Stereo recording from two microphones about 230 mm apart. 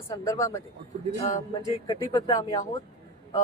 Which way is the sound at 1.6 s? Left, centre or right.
Centre.